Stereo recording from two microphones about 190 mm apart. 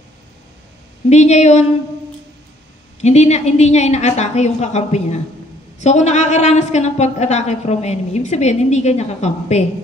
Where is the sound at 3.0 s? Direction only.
35° left (ahead or behind).